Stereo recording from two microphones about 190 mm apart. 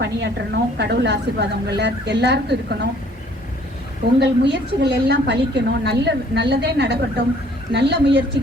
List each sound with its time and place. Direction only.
0.0 s a woman's voice: 65° right (ahead or behind)
4.2 s a woman's voice: 60° right (ahead or behind)